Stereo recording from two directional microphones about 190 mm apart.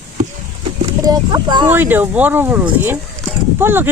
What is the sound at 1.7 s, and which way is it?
Speech, 10° right (ahead or behind).